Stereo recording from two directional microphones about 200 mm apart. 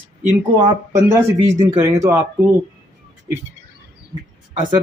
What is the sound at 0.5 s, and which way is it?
Speech, 20° right (ahead or behind).